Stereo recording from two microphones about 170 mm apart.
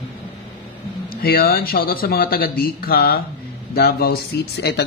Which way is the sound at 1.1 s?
60° left (ahead or behind).